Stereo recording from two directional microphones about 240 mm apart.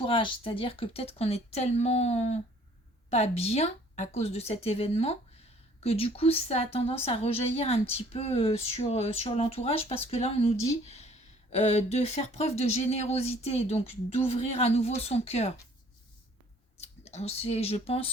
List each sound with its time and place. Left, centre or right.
0.0 s a woman's voice: left
10.8 s a sound: left
11.5 s a woman's voice: left
16.7 s speech: left